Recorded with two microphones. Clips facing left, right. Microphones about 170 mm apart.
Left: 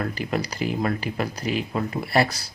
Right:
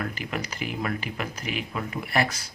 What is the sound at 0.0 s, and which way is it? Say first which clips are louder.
Speech: left 5 dB; 35° left (ahead or behind).